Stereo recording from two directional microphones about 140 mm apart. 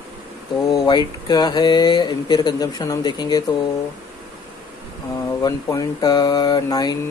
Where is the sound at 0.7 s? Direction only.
35° left (ahead or behind).